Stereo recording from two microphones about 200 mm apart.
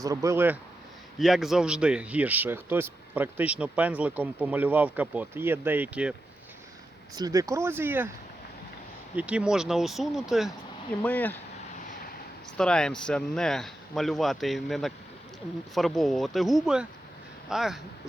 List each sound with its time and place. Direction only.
0.0 s speech: 15° right (ahead or behind)
7.2 s speech: 15° right (ahead or behind)
9.1 s speech: 5° right (ahead or behind)
11.0 s speech: 10° left (ahead or behind)
12.5 s speech: 5° left (ahead or behind)